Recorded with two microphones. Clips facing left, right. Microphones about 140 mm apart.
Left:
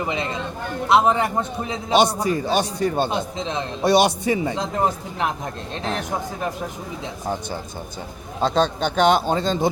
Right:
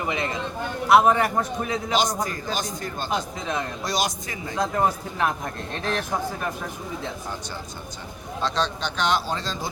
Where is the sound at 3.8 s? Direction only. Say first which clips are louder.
Left 15 dB; 65° left (ahead or behind).